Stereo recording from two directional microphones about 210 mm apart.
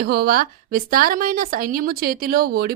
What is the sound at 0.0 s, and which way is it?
A woman's voice, 50° right (ahead or behind).